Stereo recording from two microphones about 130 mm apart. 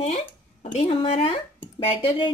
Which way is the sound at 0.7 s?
45° left (ahead or behind).